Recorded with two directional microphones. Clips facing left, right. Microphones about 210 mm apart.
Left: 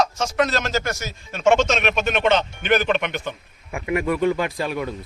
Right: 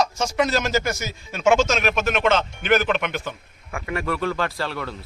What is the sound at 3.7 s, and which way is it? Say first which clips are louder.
Speech: left 4 dB; 15° left (ahead or behind).